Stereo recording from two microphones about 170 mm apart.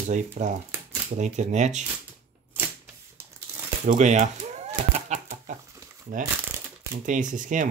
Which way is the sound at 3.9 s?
45° right (ahead or behind).